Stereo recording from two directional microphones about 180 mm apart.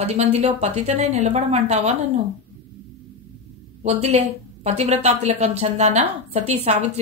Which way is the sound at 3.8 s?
35° right (ahead or behind).